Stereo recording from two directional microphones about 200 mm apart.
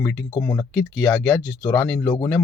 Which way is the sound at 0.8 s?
Centre (ahead or behind).